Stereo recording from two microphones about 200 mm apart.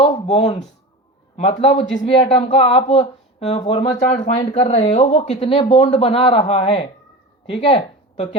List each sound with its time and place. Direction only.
0.0 s speech: 30° left (ahead or behind)
4.4 s speech: 25° left (ahead or behind)